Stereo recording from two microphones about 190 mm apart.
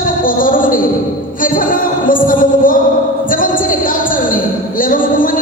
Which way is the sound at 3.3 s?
45° left (ahead or behind).